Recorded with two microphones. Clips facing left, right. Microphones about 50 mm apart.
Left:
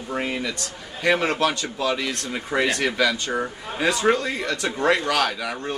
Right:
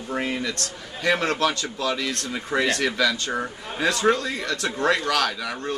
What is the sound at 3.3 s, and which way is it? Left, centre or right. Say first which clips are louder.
Speech: left 2 dB; centre.